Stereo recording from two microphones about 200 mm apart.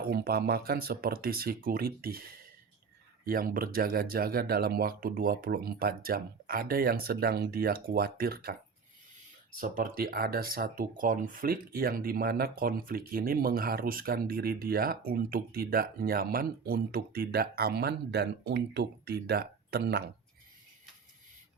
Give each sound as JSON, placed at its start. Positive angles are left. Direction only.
{"t": 0.0, "sound": "speech", "side_deg": -50}
{"t": 3.2, "sound": "speech", "side_deg": -45}
{"t": 9.6, "sound": "speech", "side_deg": -45}